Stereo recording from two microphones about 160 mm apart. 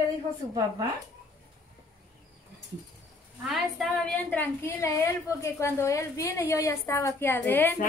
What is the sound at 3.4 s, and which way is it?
A woman's voice, centre (ahead or behind).